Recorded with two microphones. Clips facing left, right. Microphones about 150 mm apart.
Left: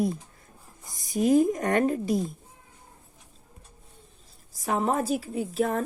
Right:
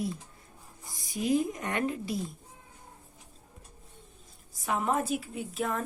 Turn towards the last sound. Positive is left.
turn(degrees=40)  # may be behind; listen again after turning